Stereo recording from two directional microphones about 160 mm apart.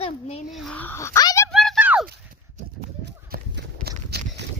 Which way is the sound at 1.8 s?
10° right (ahead or behind).